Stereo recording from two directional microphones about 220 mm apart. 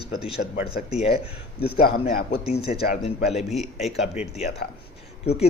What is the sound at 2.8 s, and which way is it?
Speech, 40° left (ahead or behind).